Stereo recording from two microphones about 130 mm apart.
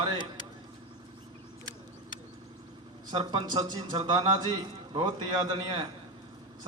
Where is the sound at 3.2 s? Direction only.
40° right (ahead or behind).